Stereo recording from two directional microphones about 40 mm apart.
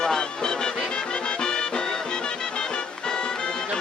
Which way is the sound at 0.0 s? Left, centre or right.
Centre.